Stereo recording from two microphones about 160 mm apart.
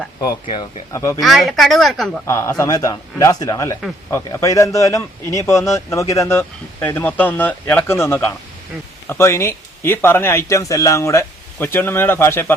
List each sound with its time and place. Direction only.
0.2 s speech: 25° left (ahead or behind)
1.2 s speech: centre (ahead or behind)
2.2 s a man's voice: 20° left (ahead or behind)